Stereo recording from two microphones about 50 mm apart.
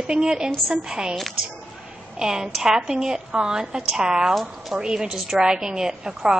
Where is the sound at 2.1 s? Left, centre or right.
Centre.